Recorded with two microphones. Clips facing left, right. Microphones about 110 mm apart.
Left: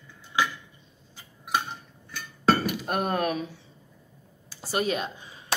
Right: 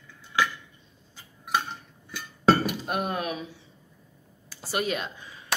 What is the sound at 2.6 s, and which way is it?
Speech, 45° left (ahead or behind).